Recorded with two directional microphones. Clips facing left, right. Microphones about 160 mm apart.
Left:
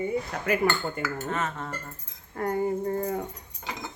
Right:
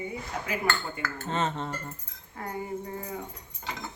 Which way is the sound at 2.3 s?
50° left (ahead or behind).